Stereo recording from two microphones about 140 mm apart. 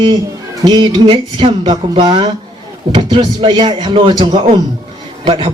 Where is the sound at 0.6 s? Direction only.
30° right (ahead or behind).